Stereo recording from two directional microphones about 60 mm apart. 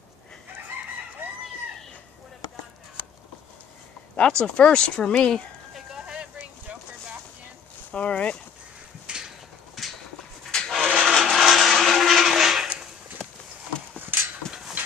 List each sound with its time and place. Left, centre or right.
1.2 s chicken: right
4.2 s speech: centre
5.8 s vehicle: centre
7.9 s speech: left
9.0 s a sound: centre
9.8 s a sound: centre
10.5 s a sound: centre
11.1 s vehicle: centre
13.9 s horse: right